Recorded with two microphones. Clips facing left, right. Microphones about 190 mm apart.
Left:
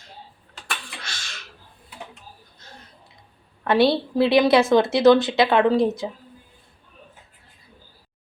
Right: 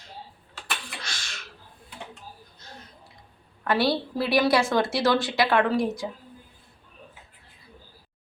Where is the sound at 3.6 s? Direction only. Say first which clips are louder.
Left 5 dB; 25° left (ahead or behind).